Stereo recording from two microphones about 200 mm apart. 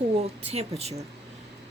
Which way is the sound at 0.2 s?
30° right (ahead or behind).